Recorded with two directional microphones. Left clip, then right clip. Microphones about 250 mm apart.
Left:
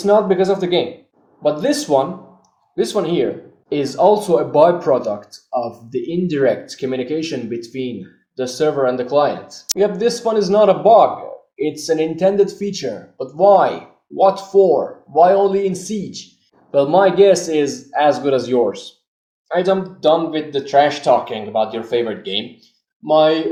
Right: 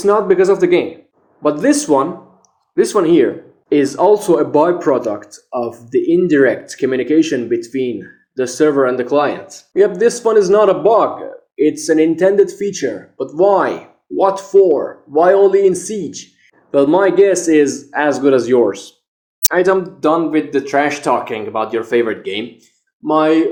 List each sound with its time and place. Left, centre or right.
0.0 s speech: right
22.2 s speech: right